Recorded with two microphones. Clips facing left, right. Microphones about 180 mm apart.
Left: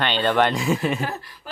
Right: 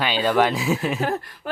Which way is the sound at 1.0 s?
50° right (ahead or behind).